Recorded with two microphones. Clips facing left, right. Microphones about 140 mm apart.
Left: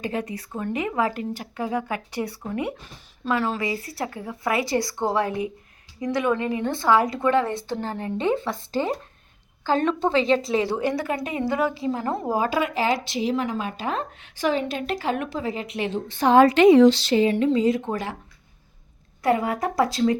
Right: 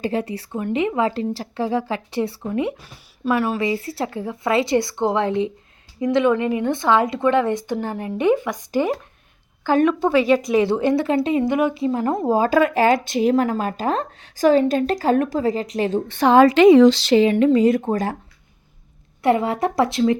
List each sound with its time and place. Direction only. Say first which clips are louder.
0.0 s a woman's voice: right 5 dB; 30° right (ahead or behind)
12.5 s speech: right 7 dB; 50° right (ahead or behind)
16.0 s speech: right 2 dB; 80° right
17.3 s speech: right 5 dB; 65° right (ahead or behind)
17.8 s speech: right 6 dB; 40° right (ahead or behind)
19.2 s speech: right 4 dB; 25° right (ahead or behind)